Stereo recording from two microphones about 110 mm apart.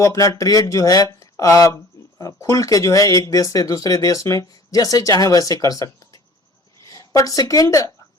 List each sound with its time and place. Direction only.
0.0 s speech: 30° left (ahead or behind)
6.9 s speech: 30° left (ahead or behind)